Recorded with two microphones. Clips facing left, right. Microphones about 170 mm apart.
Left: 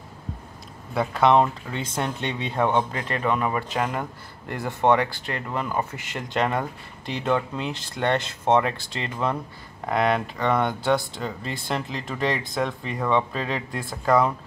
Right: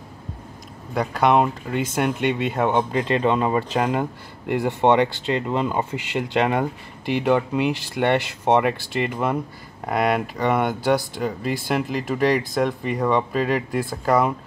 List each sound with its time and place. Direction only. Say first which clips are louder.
0.9 s speech: even; centre (ahead or behind)
2.9 s speech: right 5 dB; 20° right (ahead or behind)